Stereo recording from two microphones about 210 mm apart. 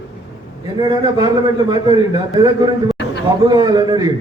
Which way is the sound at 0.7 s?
15° right (ahead or behind).